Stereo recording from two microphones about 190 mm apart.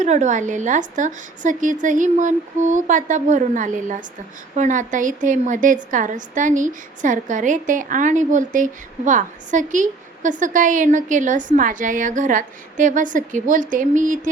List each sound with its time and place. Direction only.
0.0 s a woman's voice: 40° right (ahead or behind)